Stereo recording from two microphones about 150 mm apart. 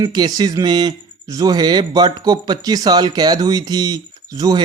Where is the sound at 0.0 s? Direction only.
25° right (ahead or behind).